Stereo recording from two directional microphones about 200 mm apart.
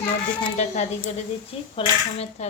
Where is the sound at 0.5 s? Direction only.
35° left (ahead or behind).